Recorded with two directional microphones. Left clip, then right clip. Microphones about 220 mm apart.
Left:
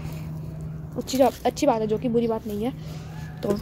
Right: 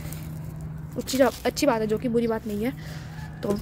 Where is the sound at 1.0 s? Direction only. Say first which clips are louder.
Left 1 dB; 10° right (ahead or behind).